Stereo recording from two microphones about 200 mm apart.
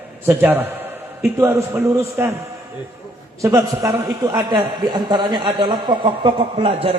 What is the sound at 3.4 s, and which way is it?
A man's voice, 15° right (ahead or behind).